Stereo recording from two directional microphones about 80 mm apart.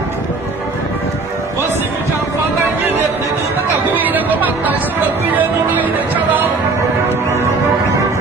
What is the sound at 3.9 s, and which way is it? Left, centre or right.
Music, right.